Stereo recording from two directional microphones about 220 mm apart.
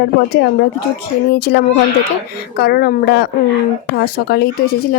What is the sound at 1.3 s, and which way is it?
Speech, 50° left (ahead or behind).